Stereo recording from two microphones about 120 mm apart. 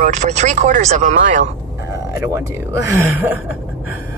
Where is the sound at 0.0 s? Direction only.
90° right.